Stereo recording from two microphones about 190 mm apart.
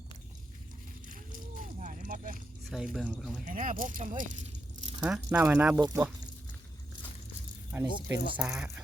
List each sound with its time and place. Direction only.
1.0 s a sound: 45° right (ahead or behind)
2.6 s speech: centre (ahead or behind)
3.4 s speech: 45° right (ahead or behind)
4.9 s speech: 5° right (ahead or behind)
7.7 s speech: 15° right (ahead or behind)